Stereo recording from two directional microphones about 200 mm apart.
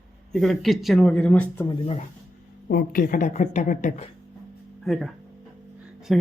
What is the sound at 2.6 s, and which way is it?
A woman's voice, 45° left (ahead or behind).